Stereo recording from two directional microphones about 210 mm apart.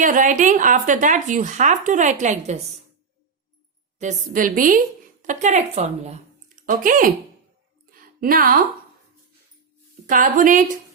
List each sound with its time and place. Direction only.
0.0 s speech: 40° right (ahead or behind)
3.9 s speech: 35° right (ahead or behind)
7.9 s a sound: 40° right (ahead or behind)
10.1 s speech: 40° right (ahead or behind)